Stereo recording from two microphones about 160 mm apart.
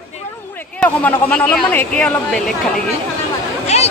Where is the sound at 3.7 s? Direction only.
40° left (ahead or behind).